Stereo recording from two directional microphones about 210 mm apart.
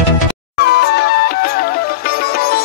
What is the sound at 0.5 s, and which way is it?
Music, 50° left (ahead or behind).